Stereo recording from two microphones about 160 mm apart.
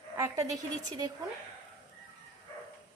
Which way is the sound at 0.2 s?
20° right (ahead or behind).